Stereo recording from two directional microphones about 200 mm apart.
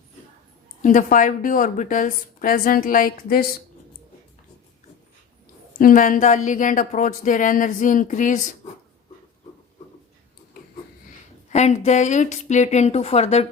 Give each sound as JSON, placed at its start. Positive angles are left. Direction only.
{"t": 0.8, "sound": "a woman's voice", "side_deg": 40}
{"t": 5.8, "sound": "speech", "side_deg": 40}
{"t": 11.5, "sound": "speech", "side_deg": 35}